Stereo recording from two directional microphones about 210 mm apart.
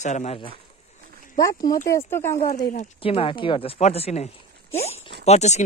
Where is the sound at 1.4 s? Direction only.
15° left (ahead or behind).